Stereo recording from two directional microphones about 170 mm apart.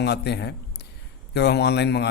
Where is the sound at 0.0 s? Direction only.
75° left (ahead or behind).